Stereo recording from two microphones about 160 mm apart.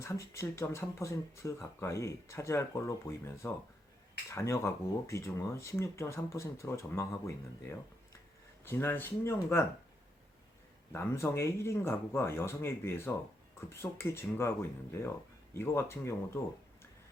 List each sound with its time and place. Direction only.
0.0 s speech: 20° left (ahead or behind)
10.9 s speech: 15° left (ahead or behind)